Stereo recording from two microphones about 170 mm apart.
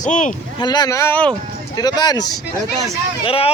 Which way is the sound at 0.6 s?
25° left (ahead or behind).